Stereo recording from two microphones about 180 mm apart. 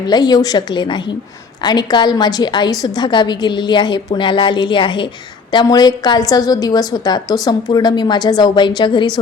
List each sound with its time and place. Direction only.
0.1 s a woman's voice: 20° left (ahead or behind)